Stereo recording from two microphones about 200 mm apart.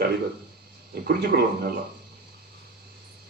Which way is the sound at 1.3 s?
55° right (ahead or behind).